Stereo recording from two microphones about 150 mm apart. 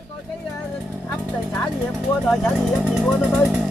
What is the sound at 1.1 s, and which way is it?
Speech, 10° left (ahead or behind).